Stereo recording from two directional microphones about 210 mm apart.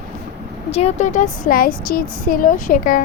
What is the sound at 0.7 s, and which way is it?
Speech, 30° left (ahead or behind).